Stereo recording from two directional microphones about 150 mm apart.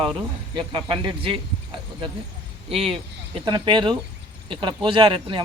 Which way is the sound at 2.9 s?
35° right (ahead or behind).